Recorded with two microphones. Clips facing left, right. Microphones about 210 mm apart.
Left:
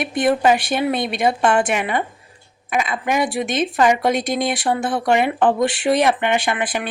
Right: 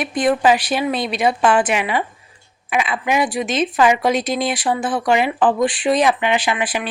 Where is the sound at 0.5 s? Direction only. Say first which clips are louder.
Even; 55° left (ahead or behind).